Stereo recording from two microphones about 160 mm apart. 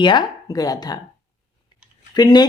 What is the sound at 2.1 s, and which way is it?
Speech, 25° left (ahead or behind).